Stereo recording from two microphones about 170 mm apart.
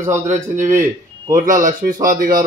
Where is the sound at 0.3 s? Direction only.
50° right (ahead or behind).